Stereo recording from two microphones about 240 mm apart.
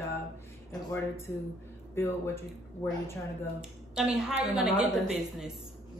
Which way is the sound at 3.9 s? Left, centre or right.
Centre.